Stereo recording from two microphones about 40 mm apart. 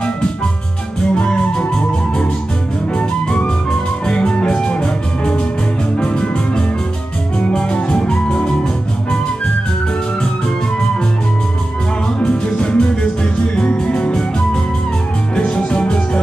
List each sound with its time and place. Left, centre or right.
1.1 s music: left
3.0 s music: left
12.2 s music: left
15.3 s music: left